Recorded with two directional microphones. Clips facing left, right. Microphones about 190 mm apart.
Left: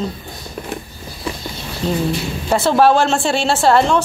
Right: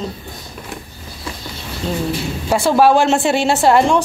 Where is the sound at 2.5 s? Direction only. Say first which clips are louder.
Right 1 dB; 10° right (ahead or behind).